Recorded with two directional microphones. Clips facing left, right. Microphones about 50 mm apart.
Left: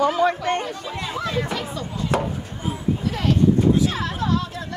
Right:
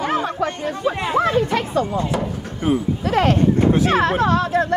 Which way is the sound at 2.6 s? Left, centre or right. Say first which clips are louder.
Right 6 dB; right.